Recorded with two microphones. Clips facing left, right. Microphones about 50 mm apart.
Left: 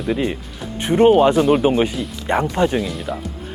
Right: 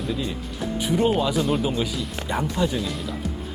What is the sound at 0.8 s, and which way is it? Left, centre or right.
Speech, left.